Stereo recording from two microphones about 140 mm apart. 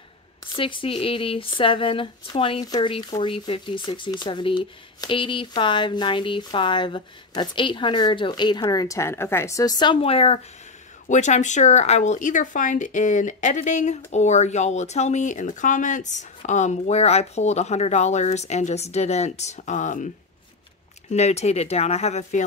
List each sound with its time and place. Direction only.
0.6 s speech: 35° left (ahead or behind)
11.1 s speech: 60° left (ahead or behind)
21.1 s speech: 50° left (ahead or behind)